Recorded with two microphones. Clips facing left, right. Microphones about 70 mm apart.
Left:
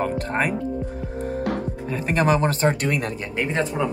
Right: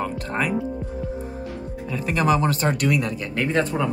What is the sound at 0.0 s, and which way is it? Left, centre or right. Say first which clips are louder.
Speech: left 2 dB; left.